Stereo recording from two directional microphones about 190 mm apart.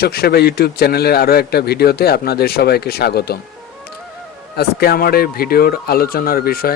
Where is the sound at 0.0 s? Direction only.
55° left (ahead or behind).